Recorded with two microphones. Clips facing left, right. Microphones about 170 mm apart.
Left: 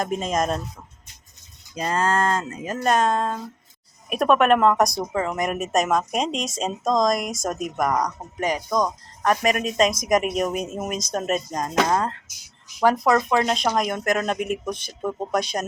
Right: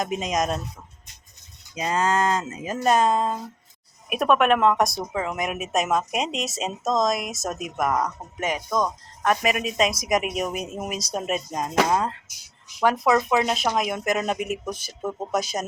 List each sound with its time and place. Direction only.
0.0 s speech: centre (ahead or behind)
1.7 s speech: 5° right (ahead or behind)
8.4 s speech: 35° left (ahead or behind)
8.7 s speech: centre (ahead or behind)